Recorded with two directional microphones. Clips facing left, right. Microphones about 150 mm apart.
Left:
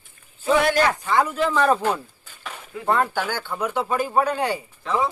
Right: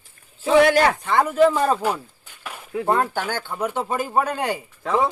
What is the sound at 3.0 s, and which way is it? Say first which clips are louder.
Speech: even; 45° right (ahead or behind).